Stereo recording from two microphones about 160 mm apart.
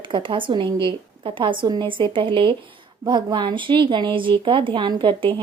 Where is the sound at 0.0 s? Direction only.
30° right (ahead or behind).